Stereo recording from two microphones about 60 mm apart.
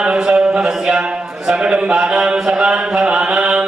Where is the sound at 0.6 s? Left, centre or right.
Centre.